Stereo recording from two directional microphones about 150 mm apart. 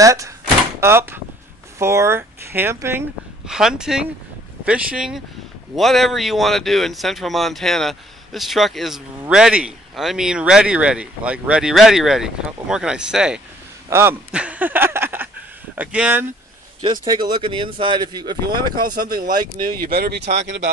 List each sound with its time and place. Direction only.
0.0 s speech: 20° right (ahead or behind)
3.4 s speech: 5° right (ahead or behind)
13.8 s a man's voice: 20° right (ahead or behind)
16.8 s speech: 30° right (ahead or behind)
19.8 s speech: 90° right